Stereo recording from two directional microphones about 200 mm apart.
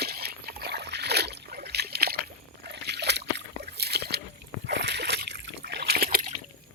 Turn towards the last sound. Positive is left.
turn(degrees=-45)  # may be behind; listen again after turning